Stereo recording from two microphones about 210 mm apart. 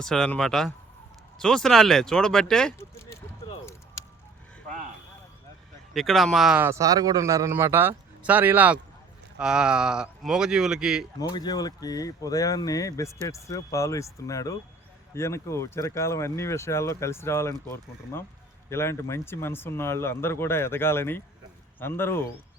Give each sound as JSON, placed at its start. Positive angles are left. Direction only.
{"t": 0.0, "sound": "speech", "side_deg": 5}
{"t": 5.9, "sound": "speech", "side_deg": 0}
{"t": 11.2, "sound": "speech", "side_deg": 20}
{"t": 18.7, "sound": "speech", "side_deg": 10}